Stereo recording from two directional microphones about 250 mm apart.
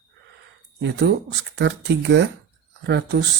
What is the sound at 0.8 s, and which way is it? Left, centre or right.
Speech, right.